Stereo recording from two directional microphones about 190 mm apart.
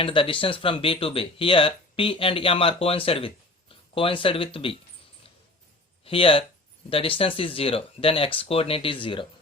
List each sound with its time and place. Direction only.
0.0 s speech: 25° left (ahead or behind)
6.1 s speech: 30° left (ahead or behind)